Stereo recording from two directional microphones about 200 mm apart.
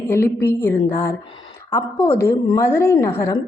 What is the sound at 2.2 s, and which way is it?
A woman's voice, 15° left (ahead or behind).